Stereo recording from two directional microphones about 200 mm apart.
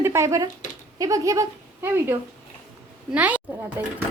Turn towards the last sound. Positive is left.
turn(degrees=-5)  # may be behind; listen again after turning